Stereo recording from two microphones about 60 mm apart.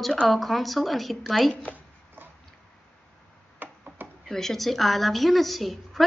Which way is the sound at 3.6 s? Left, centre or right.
Right.